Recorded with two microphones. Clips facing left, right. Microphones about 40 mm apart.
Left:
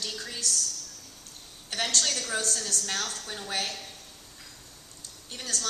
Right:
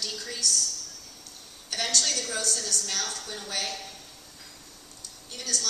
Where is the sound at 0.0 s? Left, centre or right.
Left.